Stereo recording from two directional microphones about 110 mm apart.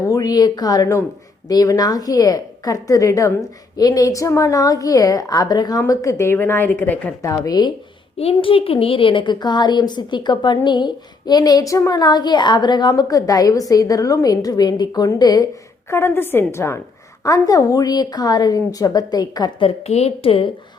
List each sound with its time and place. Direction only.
0.1 s a woman's voice: 35° left (ahead or behind); by 7.1 s 15° left (ahead or behind)
7.2 s a woman's voice: 30° left (ahead or behind)
8.2 s a woman's voice: 55° left (ahead or behind); by 15.4 s 35° left (ahead or behind)
15.9 s a woman's voice: 25° left (ahead or behind)
19.5 s a woman's voice: 60° left (ahead or behind)